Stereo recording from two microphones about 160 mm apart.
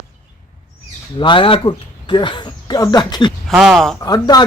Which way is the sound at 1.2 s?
30° left (ahead or behind).